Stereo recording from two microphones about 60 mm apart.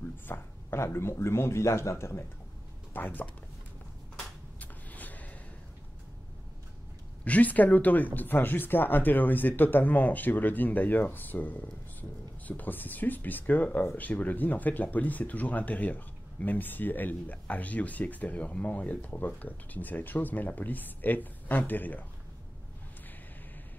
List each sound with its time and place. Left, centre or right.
0.3 s speech: left
2.9 s speech: left
4.6 s a sound: left
7.2 s speech: left